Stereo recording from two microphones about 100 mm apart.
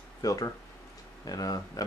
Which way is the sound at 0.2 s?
40° left (ahead or behind).